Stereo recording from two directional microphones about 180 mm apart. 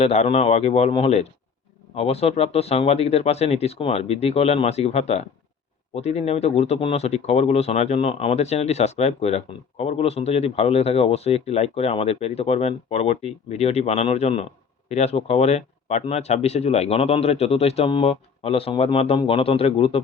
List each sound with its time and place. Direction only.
0.0 s speech: 35° left (ahead or behind)